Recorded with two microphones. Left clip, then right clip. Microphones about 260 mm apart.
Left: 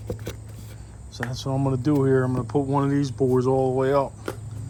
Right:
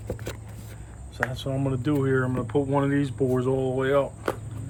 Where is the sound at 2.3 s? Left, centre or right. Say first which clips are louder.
Left 1 dB; centre.